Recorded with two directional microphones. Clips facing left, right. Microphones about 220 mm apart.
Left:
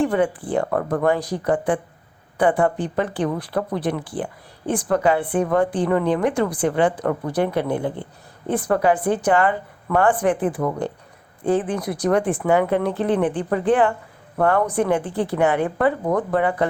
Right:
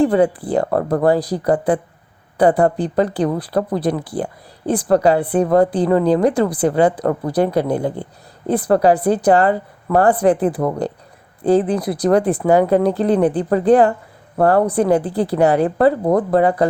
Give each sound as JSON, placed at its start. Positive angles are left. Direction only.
{"t": 0.0, "sound": "speech", "side_deg": -35}